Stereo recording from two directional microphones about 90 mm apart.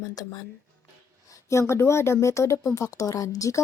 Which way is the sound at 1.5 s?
30° left (ahead or behind).